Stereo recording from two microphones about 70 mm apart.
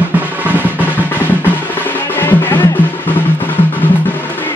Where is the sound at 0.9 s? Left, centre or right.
Left.